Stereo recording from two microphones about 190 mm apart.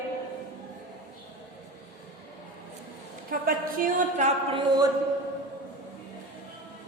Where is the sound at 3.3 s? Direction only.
50° right (ahead or behind).